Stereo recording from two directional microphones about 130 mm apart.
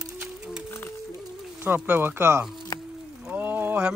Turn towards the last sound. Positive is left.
turn(degrees=-15)  # may be behind; listen again after turning